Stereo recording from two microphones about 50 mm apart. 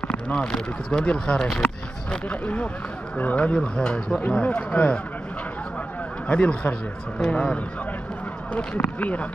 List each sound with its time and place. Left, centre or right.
0.1 s speech: centre
6.2 s speech: left
8.7 s speech: left